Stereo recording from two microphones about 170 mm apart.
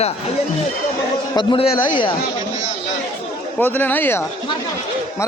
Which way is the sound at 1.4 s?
25° left (ahead or behind).